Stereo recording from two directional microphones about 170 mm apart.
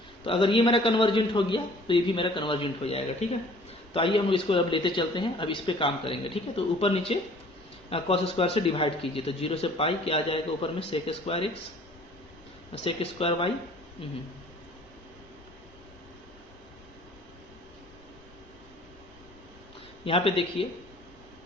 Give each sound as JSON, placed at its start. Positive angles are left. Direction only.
{"t": 0.3, "sound": "a man's voice", "side_deg": 30}
{"t": 12.7, "sound": "a man's voice", "side_deg": 35}
{"t": 20.1, "sound": "a man's voice", "side_deg": 35}